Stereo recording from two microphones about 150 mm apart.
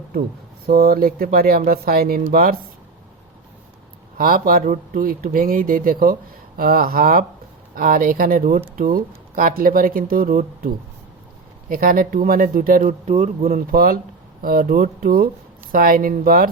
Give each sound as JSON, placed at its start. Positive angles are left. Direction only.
{"t": 0.7, "sound": "speech", "side_deg": -80}
{"t": 4.2, "sound": "speech", "side_deg": -75}
{"t": 11.7, "sound": "speech", "side_deg": -70}
{"t": 13.5, "sound": "speech", "side_deg": -75}